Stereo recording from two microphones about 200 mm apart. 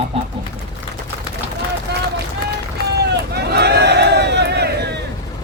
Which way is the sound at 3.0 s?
55° right (ahead or behind).